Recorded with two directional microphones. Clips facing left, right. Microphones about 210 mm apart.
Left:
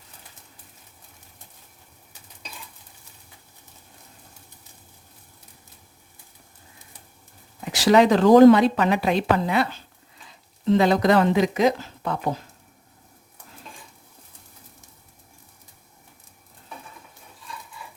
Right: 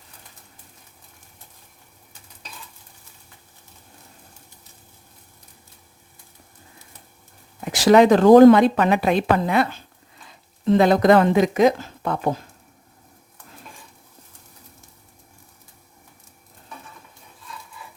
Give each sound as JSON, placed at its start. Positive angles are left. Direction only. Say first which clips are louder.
{"t": 7.6, "sound": "a woman's voice", "louder": "right 3 dB", "side_deg": -50}
{"t": 10.7, "sound": "a woman's voice", "louder": "right 3 dB", "side_deg": -50}